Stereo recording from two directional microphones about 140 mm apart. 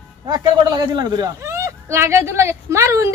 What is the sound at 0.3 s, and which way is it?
A woman's voice, 30° right (ahead or behind).